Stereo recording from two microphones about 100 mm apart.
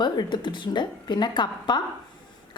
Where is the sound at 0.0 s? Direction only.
50° left (ahead or behind).